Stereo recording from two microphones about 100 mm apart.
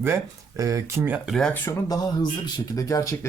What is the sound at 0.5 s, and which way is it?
Speech, 35° right (ahead or behind).